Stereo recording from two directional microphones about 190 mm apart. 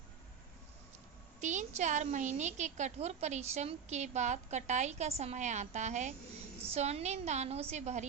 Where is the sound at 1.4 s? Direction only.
40° right (ahead or behind).